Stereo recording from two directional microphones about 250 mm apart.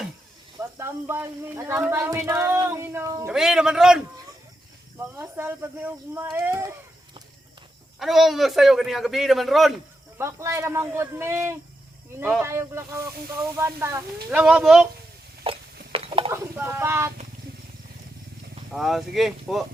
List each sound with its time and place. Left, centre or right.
0.6 s a man's voice: centre
5.1 s a man's voice: centre
10.2 s a man's voice: centre
15.4 s a sound: right
16.3 s speech: centre
18.7 s a man's voice: centre